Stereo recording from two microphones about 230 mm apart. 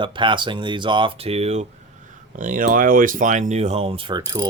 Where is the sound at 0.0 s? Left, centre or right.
Right.